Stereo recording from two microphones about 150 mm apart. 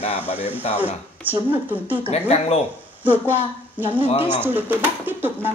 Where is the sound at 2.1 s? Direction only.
45° left (ahead or behind).